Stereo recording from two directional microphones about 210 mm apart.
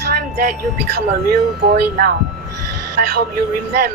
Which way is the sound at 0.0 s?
45° right (ahead or behind).